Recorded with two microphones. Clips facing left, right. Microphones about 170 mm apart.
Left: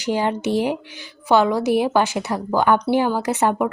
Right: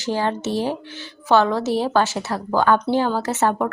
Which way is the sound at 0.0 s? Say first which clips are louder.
Left 2 dB; 15° left (ahead or behind).